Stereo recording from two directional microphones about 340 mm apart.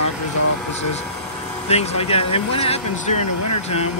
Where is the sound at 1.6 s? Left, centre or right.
Centre.